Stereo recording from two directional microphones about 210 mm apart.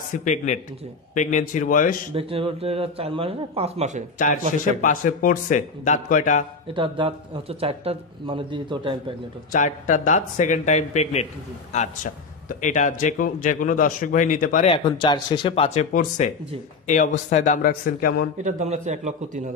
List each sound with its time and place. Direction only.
0.1 s a man's voice: 35° left (ahead or behind)
2.1 s speech: 25° right (ahead or behind)
4.8 s a man's voice: 40° left (ahead or behind)
6.7 s speech: 25° right (ahead or behind)
9.5 s a man's voice: 35° left (ahead or behind)
14.7 s a man's voice: 25° left (ahead or behind); by 18.3 s 45° left (ahead or behind)
18.4 s a man's voice: 35° right (ahead or behind)